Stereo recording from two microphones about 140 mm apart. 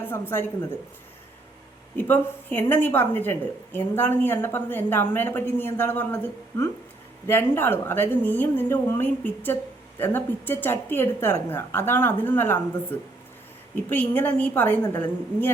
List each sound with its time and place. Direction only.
0.0 s a woman's voice: 15° left (ahead or behind)
2.0 s a woman's voice: 15° left (ahead or behind)